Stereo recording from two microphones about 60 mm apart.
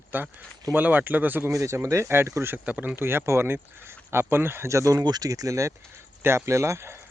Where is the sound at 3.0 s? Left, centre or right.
Right.